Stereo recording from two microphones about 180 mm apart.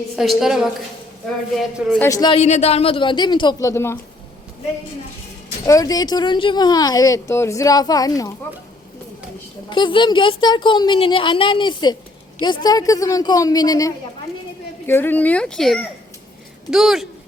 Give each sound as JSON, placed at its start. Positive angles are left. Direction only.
{"t": 0.2, "sound": "a woman's voice", "side_deg": -5}
{"t": 2.0, "sound": "speech", "side_deg": 20}
{"t": 2.4, "sound": "speech", "side_deg": 35}
{"t": 5.6, "sound": "speech", "side_deg": 20}
{"t": 9.6, "sound": "a woman's voice", "side_deg": 25}